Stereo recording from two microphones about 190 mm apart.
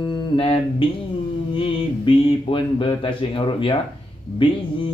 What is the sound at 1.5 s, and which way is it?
Music, 30° left (ahead or behind).